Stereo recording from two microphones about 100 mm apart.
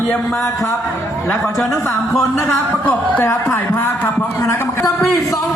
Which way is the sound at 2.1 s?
Centre (ahead or behind).